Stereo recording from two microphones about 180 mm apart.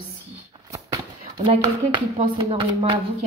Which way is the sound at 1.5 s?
30° right (ahead or behind).